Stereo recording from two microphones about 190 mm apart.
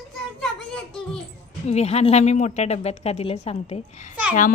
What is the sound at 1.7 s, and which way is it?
Speech, 35° left (ahead or behind).